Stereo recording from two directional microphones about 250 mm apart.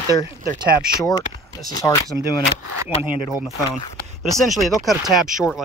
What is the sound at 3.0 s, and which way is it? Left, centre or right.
Speech, centre.